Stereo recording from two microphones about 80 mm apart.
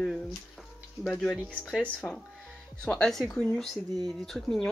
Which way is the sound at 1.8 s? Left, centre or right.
Centre.